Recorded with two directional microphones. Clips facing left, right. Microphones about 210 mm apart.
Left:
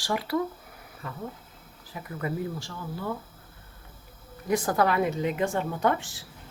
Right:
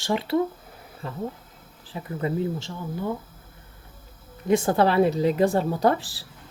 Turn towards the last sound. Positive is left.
turn(degrees=-35)  # may be behind; listen again after turning